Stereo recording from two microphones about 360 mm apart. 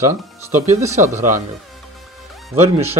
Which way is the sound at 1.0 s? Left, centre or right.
Right.